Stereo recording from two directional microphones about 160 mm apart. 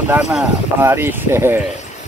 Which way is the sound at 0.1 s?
5° right (ahead or behind).